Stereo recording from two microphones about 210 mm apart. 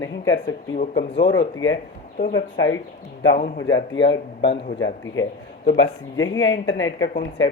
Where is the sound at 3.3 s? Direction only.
40° left (ahead or behind).